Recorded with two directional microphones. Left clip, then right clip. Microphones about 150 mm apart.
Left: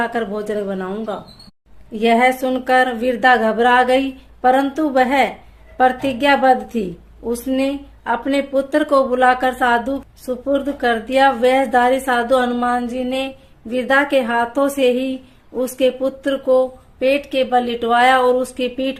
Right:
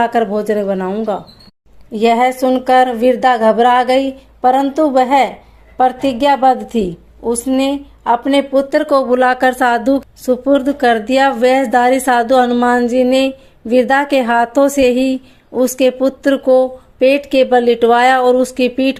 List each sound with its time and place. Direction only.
0.0 s speech: 45° right (ahead or behind)